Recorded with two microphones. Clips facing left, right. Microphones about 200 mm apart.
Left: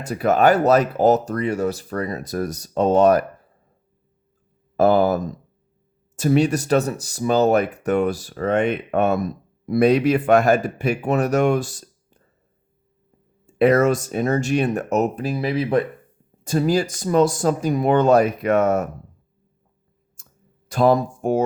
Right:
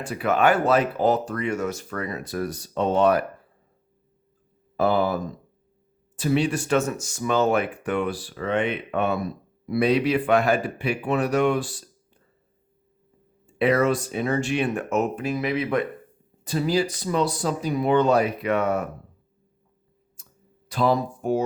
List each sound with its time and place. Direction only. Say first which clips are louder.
0.0 s speech: left 4 dB; 40° left (ahead or behind)
4.8 s speech: left 5 dB; 45° left (ahead or behind)
13.5 s speech: left 5 dB; 45° left (ahead or behind)
16.4 s speech: left 3 dB; 45° left (ahead or behind)
20.2 s clicking: left 1 dB; 45° left (ahead or behind)
20.7 s speech: left 5 dB; 50° left (ahead or behind)